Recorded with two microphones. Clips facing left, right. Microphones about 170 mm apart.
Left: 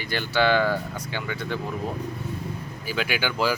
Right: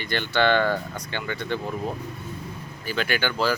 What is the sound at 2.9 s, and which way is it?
Speech, 5° left (ahead or behind).